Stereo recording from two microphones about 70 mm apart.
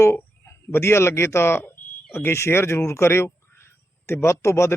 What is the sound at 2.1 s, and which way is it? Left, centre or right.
Speech, left.